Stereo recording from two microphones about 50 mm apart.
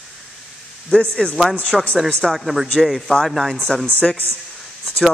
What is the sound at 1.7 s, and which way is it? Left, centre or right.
Speech, centre.